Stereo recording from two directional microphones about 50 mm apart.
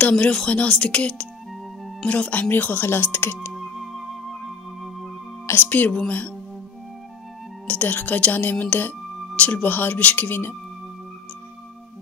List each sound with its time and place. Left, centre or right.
0.0 s speech: left
2.5 s speech: left
3.5 s music: centre
5.6 s speech: left
7.6 s speech: left